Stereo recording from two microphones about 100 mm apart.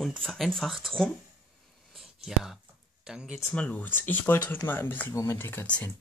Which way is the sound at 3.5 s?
15° left (ahead or behind).